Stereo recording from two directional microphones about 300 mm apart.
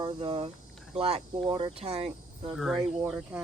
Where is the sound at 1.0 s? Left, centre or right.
Centre.